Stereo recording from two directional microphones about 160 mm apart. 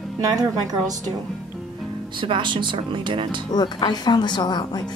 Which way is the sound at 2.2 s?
30° right (ahead or behind).